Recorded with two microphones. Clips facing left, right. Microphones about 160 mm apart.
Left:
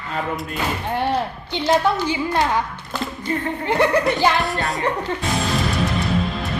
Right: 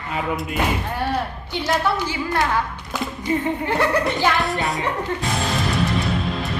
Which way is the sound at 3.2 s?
15° right (ahead or behind).